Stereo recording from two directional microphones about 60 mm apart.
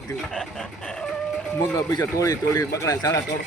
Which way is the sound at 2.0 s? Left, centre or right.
Left.